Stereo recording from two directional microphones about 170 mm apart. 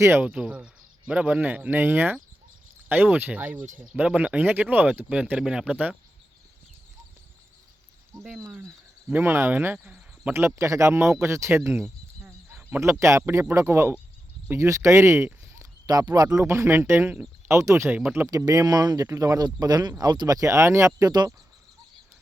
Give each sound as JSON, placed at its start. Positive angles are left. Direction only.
{"t": 0.0, "sound": "speech", "side_deg": -15}
{"t": 8.4, "sound": "speech", "side_deg": -10}